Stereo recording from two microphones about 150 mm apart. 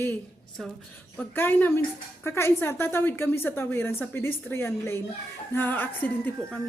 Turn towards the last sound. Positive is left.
turn(degrees=10)  # may be behind; listen again after turning